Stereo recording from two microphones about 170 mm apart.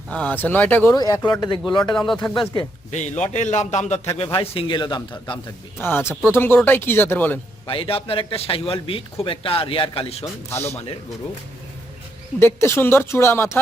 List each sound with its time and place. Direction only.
0.1 s speech: 10° left (ahead or behind)
0.9 s speech: 20° left (ahead or behind)
2.9 s a man's voice: 45° left (ahead or behind); by 5.4 s 25° left (ahead or behind)
5.8 s speech: 15° left (ahead or behind)
7.7 s speech: 35° left (ahead or behind)
10.5 s speech: 10° left (ahead or behind)
12.4 s speech: 15° left (ahead or behind)